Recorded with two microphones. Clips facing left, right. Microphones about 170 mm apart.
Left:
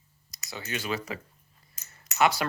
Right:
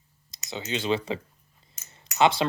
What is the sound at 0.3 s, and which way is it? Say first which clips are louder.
Speech: right 4 dB; 25° right (ahead or behind).